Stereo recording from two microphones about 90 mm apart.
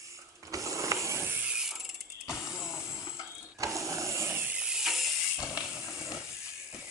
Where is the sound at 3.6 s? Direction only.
35° right (ahead or behind).